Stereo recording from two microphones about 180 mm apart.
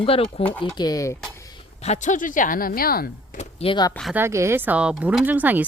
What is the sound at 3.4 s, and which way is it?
Speech, 35° left (ahead or behind).